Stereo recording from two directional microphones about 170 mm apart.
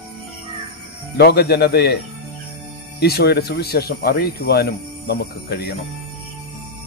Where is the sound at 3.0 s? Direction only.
70° left (ahead or behind).